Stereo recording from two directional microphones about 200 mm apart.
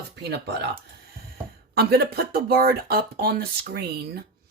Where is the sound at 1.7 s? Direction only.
55° right (ahead or behind).